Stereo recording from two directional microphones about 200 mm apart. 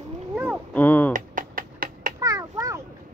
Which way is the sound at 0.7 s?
10° left (ahead or behind).